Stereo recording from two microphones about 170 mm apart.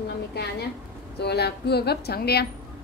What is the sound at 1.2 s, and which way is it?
A woman's voice, 75° left (ahead or behind).